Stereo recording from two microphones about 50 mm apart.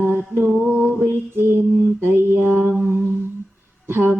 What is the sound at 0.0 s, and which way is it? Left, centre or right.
Mantra, right.